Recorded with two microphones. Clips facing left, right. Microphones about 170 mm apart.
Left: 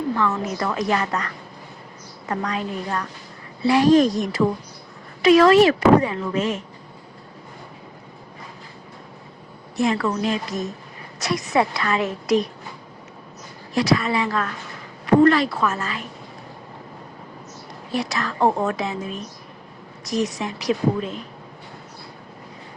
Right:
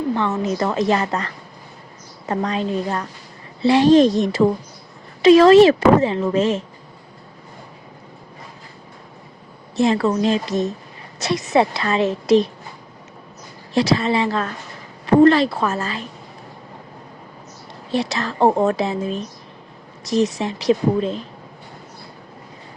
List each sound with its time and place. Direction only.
0.1 s speech: 25° right (ahead or behind)
9.7 s speech: 30° right (ahead or behind)
13.7 s speech: 30° right (ahead or behind)
17.9 s speech: 25° right (ahead or behind)